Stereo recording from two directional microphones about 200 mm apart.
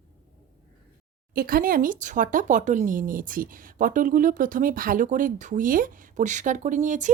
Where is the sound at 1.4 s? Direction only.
45° right (ahead or behind).